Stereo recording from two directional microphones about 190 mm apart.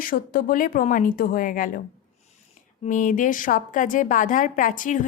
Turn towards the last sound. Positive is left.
turn(degrees=45)  # may be behind; listen again after turning